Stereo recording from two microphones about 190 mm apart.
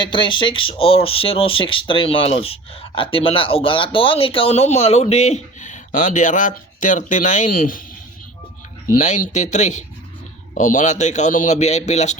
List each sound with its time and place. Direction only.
0.0 s speech: 25° left (ahead or behind); by 7.8 s 50° left (ahead or behind)
8.9 s a man's voice: 40° left (ahead or behind)